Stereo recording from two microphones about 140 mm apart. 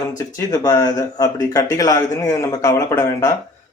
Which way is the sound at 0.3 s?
25° left (ahead or behind).